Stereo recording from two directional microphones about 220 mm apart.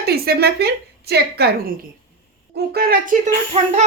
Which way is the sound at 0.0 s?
45° right (ahead or behind).